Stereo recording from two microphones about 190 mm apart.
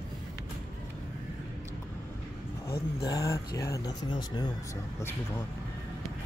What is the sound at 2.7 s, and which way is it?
Speech, 25° left (ahead or behind).